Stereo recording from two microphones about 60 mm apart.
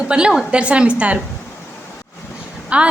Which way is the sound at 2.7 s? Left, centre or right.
Right.